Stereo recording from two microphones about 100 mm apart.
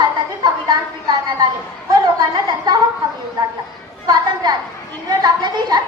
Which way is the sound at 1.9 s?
45° right (ahead or behind).